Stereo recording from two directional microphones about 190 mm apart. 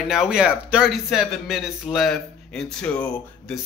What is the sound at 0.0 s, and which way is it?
Speech, centre (ahead or behind).